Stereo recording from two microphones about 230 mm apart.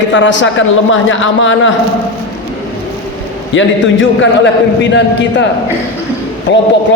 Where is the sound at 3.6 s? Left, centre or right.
Left.